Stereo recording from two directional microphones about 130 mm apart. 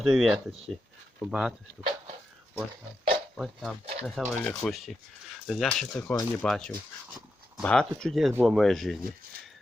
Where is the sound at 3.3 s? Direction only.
Centre (ahead or behind).